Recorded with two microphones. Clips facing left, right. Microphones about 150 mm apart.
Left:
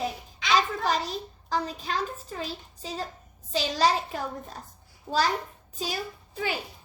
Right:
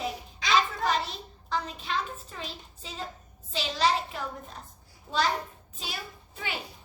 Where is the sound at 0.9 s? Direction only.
40° left (ahead or behind).